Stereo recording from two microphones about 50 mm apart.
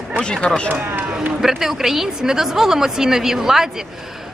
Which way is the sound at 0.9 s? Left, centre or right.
Right.